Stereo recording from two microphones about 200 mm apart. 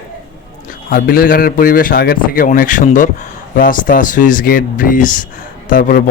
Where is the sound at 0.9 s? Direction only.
45° left (ahead or behind).